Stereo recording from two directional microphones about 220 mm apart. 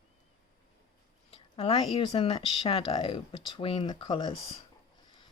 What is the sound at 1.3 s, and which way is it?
Speech, 25° left (ahead or behind).